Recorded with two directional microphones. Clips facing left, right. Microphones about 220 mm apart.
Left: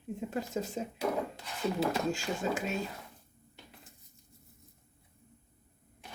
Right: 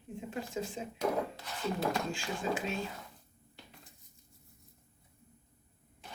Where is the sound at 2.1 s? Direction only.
40° left (ahead or behind).